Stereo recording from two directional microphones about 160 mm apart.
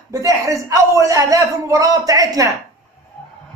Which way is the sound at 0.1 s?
20° right (ahead or behind).